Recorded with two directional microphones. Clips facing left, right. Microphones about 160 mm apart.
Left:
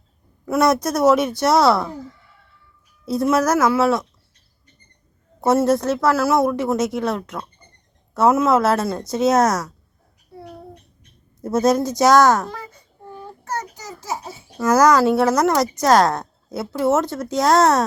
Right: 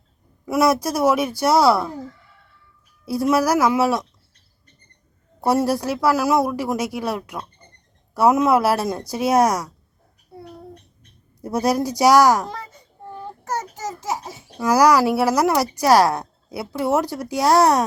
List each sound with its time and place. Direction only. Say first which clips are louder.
0.4 s speech: left 1 dB; 10° right (ahead or behind)
3.1 s speech: left 1 dB; 10° right (ahead or behind)
5.5 s speech: left 3 dB; 10° right (ahead or behind)
11.4 s speech: left 3 dB; 15° right (ahead or behind)
14.6 s speech: left 1 dB; 10° right (ahead or behind)